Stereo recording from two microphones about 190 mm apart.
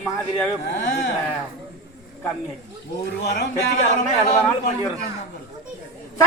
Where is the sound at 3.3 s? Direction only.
55° left (ahead or behind).